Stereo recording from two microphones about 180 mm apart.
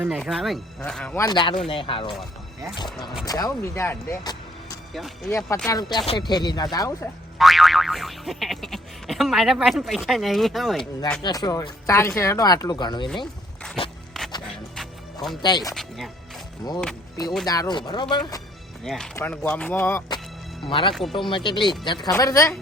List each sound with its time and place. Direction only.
0.2 s speech: centre (ahead or behind)
1.2 s speech: 25° left (ahead or behind)
3.2 s speech: 20° left (ahead or behind)
4.9 s speech: centre (ahead or behind)
5.6 s speech: 20° left (ahead or behind)
7.3 s boing: centre (ahead or behind)
11.2 s speech: 20° left (ahead or behind)
14.2 s music: centre (ahead or behind)
15.4 s speech: 20° left (ahead or behind)
15.7 s speech: centre (ahead or behind)
16.6 s speech: 20° left (ahead or behind)
18.9 s speech: 5° left (ahead or behind)
20.7 s speech: 30° left (ahead or behind)